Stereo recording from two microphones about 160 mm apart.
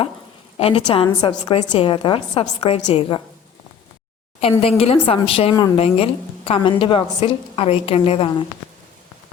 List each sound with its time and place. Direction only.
0.5 s a woman's voice: 40° left (ahead or behind)
4.6 s a woman's voice: 35° left (ahead or behind)